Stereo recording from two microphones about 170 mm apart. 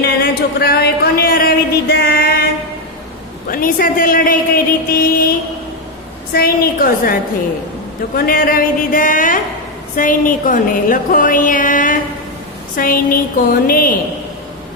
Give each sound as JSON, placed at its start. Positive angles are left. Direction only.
{"t": 0.0, "sound": "a sound", "side_deg": 65}
{"t": 3.5, "sound": "speech", "side_deg": 55}
{"t": 6.3, "sound": "a woman's voice", "side_deg": 60}